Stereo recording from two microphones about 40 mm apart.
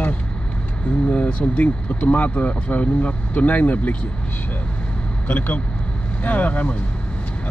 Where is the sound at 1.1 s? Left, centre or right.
Left.